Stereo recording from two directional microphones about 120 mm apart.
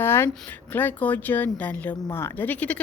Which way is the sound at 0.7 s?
15° left (ahead or behind).